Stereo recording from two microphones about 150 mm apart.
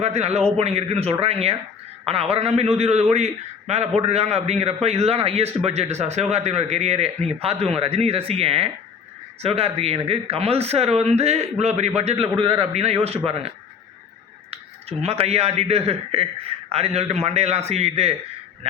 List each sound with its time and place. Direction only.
0.0 s a man's voice: 45° right (ahead or behind)
14.5 s a man's voice: 45° right (ahead or behind)